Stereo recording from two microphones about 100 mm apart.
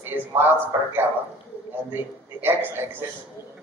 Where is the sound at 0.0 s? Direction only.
20° right (ahead or behind).